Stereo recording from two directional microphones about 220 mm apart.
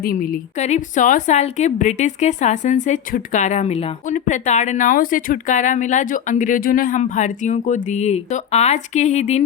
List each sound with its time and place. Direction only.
0.0 s a woman's voice: 40° left (ahead or behind)